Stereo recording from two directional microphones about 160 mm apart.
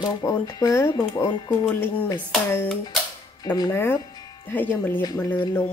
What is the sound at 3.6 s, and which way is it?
Speech, 15° left (ahead or behind).